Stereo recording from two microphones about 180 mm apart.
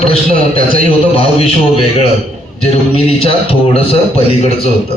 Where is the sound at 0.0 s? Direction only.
35° left (ahead or behind).